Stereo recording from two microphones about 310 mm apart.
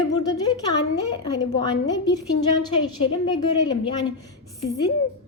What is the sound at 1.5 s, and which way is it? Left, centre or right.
A woman's voice, centre.